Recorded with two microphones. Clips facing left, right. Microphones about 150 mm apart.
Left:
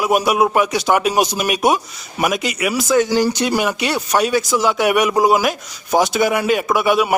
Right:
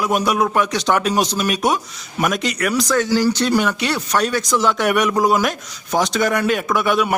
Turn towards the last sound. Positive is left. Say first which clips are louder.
# left 2 dB
turn(degrees=5)  # may be behind; listen again after turning